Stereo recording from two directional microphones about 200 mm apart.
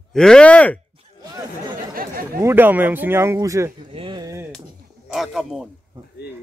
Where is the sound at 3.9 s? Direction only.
25° right (ahead or behind).